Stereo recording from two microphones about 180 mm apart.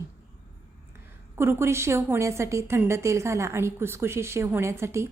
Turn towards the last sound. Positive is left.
turn(degrees=-15)  # may be behind; listen again after turning